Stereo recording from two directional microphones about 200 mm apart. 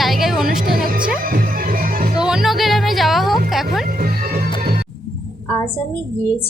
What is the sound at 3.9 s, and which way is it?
Music, 45° right (ahead or behind).